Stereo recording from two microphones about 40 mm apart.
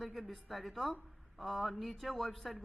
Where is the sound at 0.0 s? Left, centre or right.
Centre.